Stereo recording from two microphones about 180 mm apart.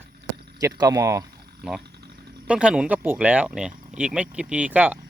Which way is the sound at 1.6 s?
5° right (ahead or behind).